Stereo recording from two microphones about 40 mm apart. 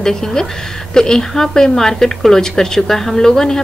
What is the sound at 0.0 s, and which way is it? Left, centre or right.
A woman's voice, centre.